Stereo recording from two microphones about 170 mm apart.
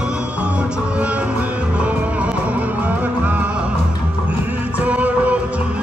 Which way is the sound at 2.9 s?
10° right (ahead or behind).